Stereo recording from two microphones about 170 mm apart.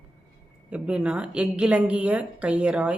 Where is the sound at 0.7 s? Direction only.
5° right (ahead or behind).